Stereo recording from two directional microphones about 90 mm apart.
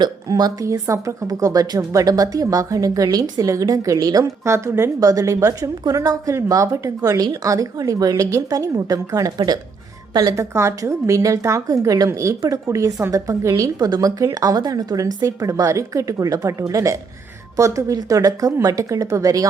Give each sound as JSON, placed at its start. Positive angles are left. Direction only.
{"t": 0.0, "sound": "a woman's voice", "side_deg": -50}